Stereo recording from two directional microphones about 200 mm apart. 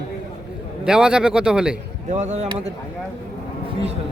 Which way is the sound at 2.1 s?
35° right (ahead or behind).